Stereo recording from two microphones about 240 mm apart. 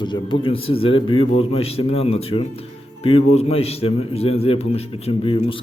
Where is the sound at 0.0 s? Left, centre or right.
Centre.